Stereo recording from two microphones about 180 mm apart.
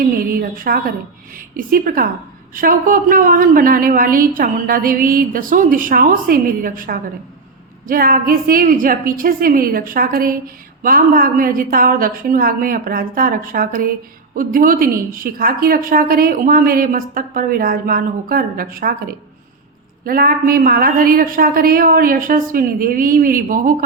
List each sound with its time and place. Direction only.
0.0 s a woman's voice: 55° right (ahead or behind)